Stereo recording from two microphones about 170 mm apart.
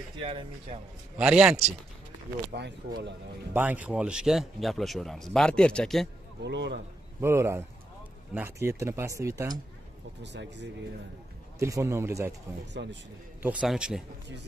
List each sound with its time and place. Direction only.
0.2 s speech: 30° right (ahead or behind)
1.1 s a man's voice: 5° right (ahead or behind)
2.5 s speech: 80° right
3.5 s a man's voice: 10° right (ahead or behind)
6.4 s speech: 90° right
7.2 s speech: 15° right (ahead or behind)
10.2 s speech: 90° right
11.6 s speech: 15° right (ahead or behind)
12.8 s speech: 90° right
13.4 s a man's voice: 5° right (ahead or behind)